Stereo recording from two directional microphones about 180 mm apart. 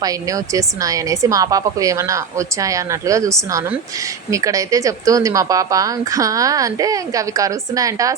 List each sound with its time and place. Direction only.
0.0 s speech: 20° right (ahead or behind)